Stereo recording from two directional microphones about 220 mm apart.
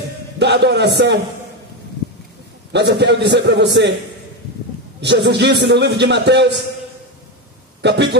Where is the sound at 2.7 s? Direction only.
50° right (ahead or behind).